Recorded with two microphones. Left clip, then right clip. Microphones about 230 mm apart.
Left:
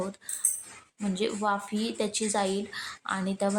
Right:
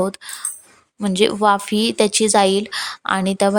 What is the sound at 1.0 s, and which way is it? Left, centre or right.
Speech, right.